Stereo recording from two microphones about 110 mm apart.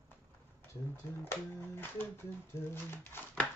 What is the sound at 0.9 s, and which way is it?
Speech, 20° left (ahead or behind).